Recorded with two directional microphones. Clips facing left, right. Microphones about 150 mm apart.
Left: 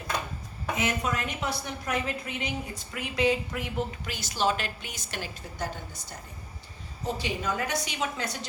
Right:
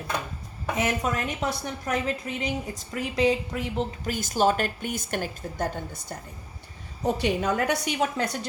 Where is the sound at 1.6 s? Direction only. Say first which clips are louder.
Right 3 dB; 35° right (ahead or behind).